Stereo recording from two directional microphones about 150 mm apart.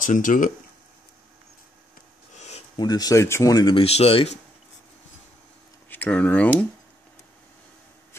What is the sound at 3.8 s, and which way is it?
Speech, 40° left (ahead or behind).